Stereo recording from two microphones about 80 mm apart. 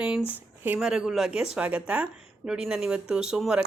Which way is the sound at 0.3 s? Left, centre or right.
Right.